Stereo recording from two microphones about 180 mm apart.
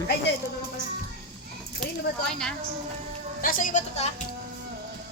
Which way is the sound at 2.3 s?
5° left (ahead or behind).